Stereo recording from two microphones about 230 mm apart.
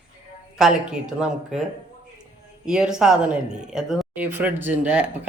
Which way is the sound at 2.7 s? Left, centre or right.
Centre.